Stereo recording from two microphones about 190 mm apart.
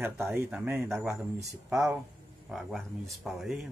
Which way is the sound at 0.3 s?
10° right (ahead or behind).